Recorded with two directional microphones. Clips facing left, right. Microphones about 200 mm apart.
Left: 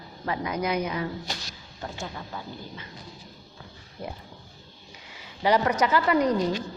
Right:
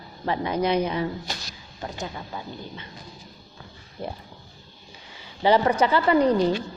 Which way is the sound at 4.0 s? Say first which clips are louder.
Right 3 dB; 30° right (ahead or behind).